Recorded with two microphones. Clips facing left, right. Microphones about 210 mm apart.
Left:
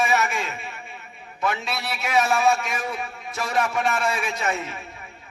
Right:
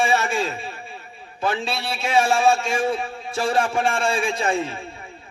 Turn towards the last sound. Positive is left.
turn(degrees=-30)  # may be behind; listen again after turning